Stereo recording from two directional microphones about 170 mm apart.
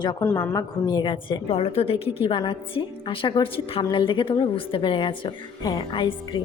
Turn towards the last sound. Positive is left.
turn(degrees=30)  # may be behind; listen again after turning